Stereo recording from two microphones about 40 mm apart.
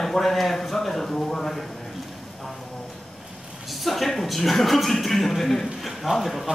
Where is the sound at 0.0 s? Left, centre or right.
Centre.